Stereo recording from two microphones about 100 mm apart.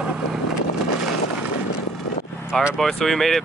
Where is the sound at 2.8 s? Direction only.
5° left (ahead or behind).